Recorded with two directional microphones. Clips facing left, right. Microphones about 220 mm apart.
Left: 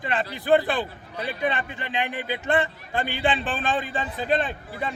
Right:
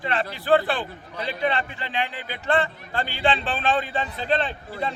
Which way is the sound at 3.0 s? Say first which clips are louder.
Right 1 dB; 50° left (ahead or behind).